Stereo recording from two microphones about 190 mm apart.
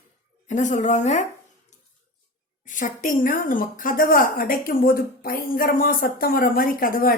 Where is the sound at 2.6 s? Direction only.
45° left (ahead or behind).